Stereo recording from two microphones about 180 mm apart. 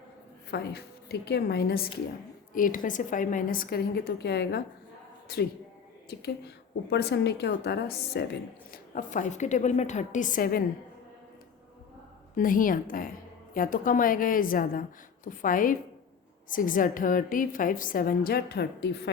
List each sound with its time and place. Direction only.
0.5 s a woman's voice: 65° left (ahead or behind)
2.6 s a woman's voice: 50° left (ahead or behind); by 4.6 s 70° left (ahead or behind)
6.9 s a woman's voice: 70° left (ahead or behind)
9.0 s a woman's voice: 45° left (ahead or behind)
12.4 s a woman's voice: 50° left (ahead or behind); by 19.1 s 65° left (ahead or behind)